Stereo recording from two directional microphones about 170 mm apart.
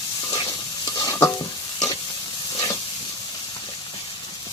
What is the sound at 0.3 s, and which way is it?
Stir, 25° left (ahead or behind).